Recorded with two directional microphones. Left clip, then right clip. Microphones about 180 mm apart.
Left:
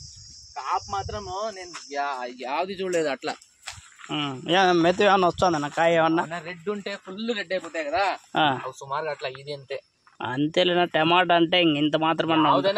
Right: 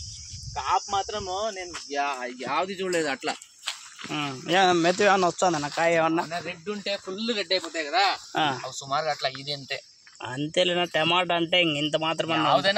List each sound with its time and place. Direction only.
0.6 s speech: 40° right (ahead or behind)
1.7 s speech: 55° right (ahead or behind)
2.7 s speech: 15° right (ahead or behind)
4.1 s speech: 30° left (ahead or behind)
5.2 s speech: 20° left (ahead or behind)
6.2 s speech: 45° left (ahead or behind)
10.2 s speech: 40° left (ahead or behind)